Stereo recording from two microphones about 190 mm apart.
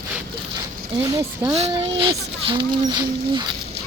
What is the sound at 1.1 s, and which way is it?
Speech, 20° right (ahead or behind).